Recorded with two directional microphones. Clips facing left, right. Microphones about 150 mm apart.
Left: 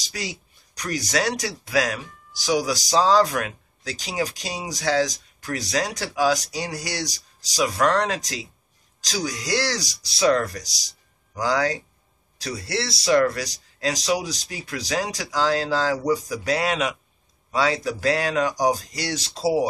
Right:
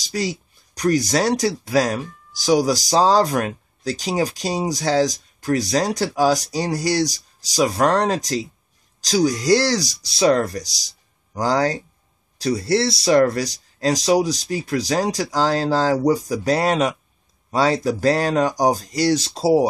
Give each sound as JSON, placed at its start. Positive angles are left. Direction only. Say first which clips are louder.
{"t": 0.1, "sound": "speech", "louder": "right 9 dB", "side_deg": -40}